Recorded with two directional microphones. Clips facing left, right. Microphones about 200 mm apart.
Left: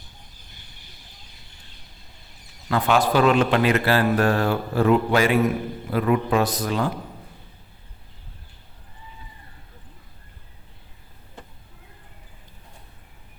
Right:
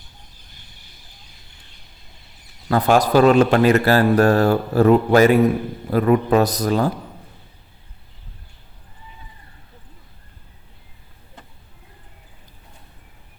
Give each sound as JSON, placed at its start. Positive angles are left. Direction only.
{"t": 2.6, "sound": "a man's voice", "side_deg": -40}